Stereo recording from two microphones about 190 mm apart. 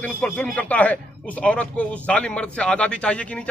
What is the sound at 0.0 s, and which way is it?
A man's voice, 10° left (ahead or behind).